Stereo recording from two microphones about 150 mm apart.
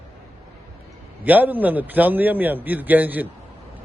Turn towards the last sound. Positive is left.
turn(degrees=-10)  # may be behind; listen again after turning